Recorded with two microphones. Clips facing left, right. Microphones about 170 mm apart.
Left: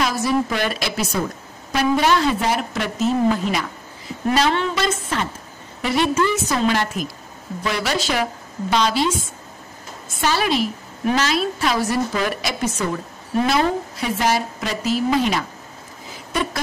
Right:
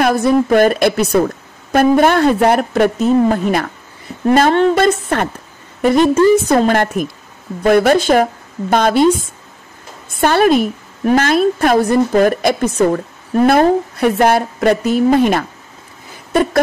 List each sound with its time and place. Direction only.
0.0 s a woman's voice: 55° right (ahead or behind)
10.2 s a woman's voice: 55° right (ahead or behind)